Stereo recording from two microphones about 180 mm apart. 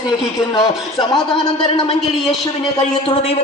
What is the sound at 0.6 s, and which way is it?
Speech, 25° left (ahead or behind).